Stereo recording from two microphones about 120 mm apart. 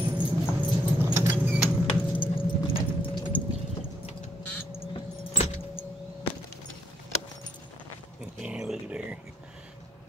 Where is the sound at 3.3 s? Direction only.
15° left (ahead or behind).